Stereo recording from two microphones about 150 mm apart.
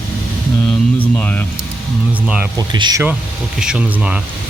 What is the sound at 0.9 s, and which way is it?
Mantra, 10° left (ahead or behind).